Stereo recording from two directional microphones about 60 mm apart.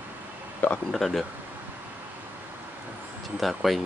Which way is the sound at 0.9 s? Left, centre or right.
Centre.